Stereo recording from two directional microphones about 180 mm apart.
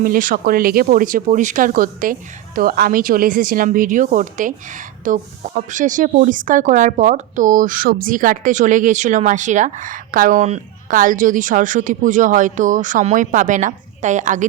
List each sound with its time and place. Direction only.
0.0 s speech: 50° right (ahead or behind)